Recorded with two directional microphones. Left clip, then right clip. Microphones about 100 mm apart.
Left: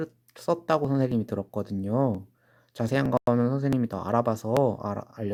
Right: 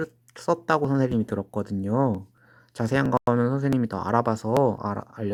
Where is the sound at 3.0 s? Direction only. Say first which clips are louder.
Right 1 dB; centre (ahead or behind).